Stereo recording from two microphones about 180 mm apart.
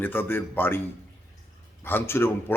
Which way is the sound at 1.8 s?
10° left (ahead or behind).